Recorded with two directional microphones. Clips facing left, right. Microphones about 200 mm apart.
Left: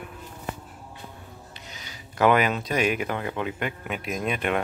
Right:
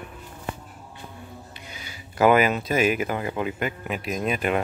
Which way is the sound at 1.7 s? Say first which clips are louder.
Right 2 dB; 5° right (ahead or behind).